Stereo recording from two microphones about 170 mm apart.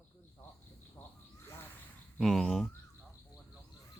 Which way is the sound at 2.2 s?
Centre (ahead or behind).